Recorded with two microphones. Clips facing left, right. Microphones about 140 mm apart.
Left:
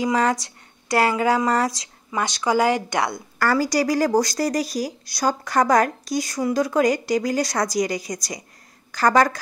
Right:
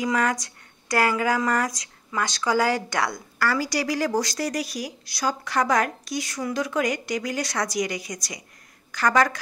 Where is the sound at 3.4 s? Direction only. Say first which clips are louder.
Left 5 dB; 45° left (ahead or behind).